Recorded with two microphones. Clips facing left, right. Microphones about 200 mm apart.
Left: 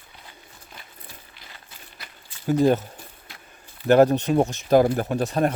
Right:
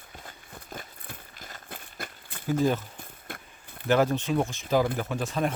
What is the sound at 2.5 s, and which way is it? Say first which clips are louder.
Speech: left 6 dB; 40° left (ahead or behind).